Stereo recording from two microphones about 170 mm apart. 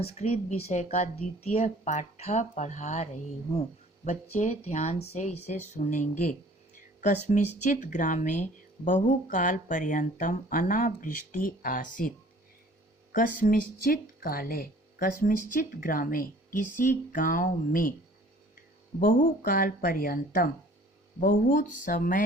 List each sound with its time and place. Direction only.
0.0 s speech: 35° left (ahead or behind); by 12.1 s 55° left (ahead or behind)
13.1 s speech: 50° left (ahead or behind)
18.9 s speech: 55° left (ahead or behind)